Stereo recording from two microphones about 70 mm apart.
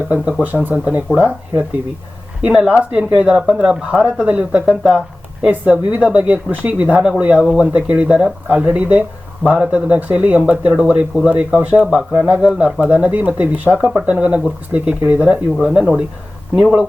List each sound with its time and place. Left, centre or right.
0.6 s speech: right